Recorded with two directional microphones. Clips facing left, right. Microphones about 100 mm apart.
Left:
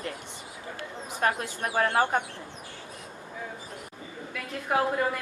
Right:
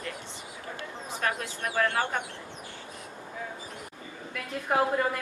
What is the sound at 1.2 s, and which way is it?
Speech, 35° left (ahead or behind).